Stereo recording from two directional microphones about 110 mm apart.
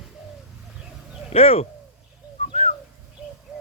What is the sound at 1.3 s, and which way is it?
Speech, 60° left (ahead or behind).